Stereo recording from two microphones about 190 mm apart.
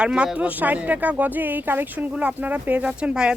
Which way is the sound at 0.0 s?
5° right (ahead or behind).